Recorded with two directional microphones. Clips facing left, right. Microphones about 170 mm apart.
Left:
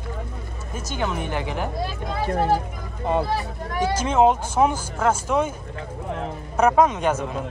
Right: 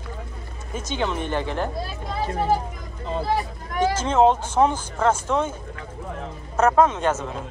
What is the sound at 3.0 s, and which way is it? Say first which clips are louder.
Speech: left 6 dB; 60° left (ahead or behind).